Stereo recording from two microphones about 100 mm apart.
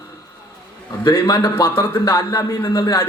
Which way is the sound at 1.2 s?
25° left (ahead or behind).